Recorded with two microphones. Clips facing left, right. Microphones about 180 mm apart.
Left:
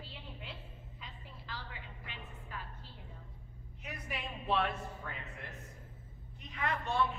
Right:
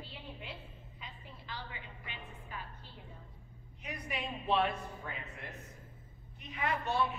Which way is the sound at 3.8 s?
5° left (ahead or behind).